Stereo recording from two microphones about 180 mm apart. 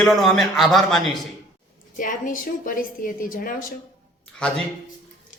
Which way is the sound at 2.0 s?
50° left (ahead or behind).